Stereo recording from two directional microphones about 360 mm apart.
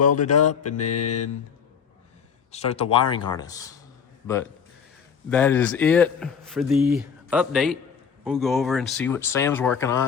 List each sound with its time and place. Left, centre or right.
0.2 s mantra: left
2.5 s speech: centre
5.3 s a man's voice: centre